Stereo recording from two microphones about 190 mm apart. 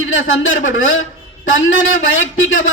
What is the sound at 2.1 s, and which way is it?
Speech, 90° left.